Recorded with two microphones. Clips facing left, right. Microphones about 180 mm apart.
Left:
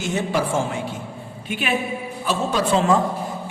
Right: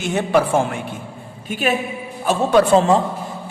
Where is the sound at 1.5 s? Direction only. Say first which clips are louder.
Right 6 dB; 40° right (ahead or behind).